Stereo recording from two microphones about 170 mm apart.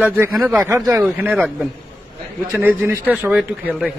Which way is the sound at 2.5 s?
15° right (ahead or behind).